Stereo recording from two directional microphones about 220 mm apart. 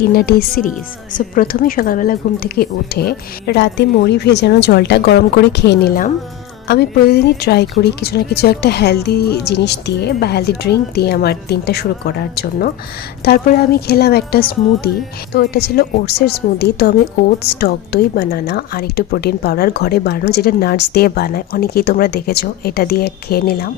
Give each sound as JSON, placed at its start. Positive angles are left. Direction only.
{"t": 0.0, "sound": "speech", "side_deg": 45}